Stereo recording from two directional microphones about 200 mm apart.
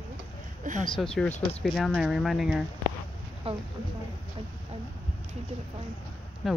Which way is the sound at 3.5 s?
30° right (ahead or behind).